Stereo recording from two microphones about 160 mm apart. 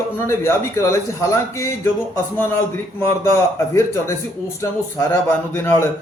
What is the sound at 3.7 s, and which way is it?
Speech, 15° left (ahead or behind).